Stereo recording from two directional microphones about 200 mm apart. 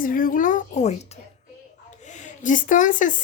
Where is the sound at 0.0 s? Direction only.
45° left (ahead or behind).